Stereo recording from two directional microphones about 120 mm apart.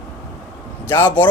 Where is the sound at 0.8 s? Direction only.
20° left (ahead or behind).